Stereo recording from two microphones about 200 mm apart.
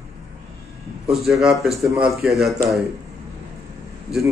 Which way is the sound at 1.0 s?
Centre (ahead or behind).